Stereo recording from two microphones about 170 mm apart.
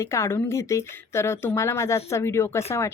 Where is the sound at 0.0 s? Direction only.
15° left (ahead or behind).